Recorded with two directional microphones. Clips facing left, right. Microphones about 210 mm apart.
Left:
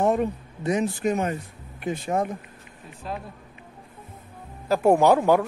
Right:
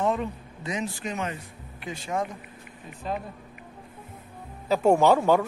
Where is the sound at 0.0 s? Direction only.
45° left (ahead or behind).